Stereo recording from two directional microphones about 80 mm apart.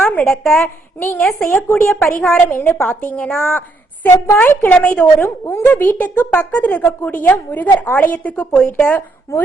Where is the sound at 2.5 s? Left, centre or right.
Left.